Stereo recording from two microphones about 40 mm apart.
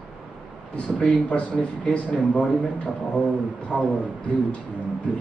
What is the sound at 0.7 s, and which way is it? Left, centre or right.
Speech, left.